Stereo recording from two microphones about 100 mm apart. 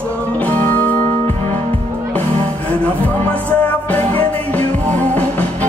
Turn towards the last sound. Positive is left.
turn(degrees=15)  # may be behind; listen again after turning